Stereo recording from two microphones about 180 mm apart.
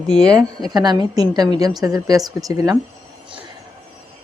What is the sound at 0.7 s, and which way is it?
Speech, 25° right (ahead or behind).